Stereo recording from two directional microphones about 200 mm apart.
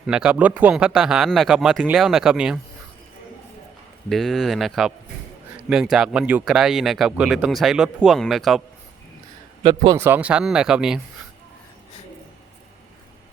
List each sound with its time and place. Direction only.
0.0 s speech: 5° right (ahead or behind)
4.1 s speech: centre (ahead or behind)
9.6 s a man's voice: 25° right (ahead or behind)
10.0 s speech: 10° right (ahead or behind)